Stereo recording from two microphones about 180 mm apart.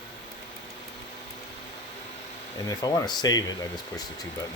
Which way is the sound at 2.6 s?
20° left (ahead or behind).